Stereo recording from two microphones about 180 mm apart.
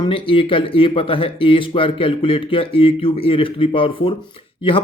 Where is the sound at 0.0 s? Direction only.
30° left (ahead or behind).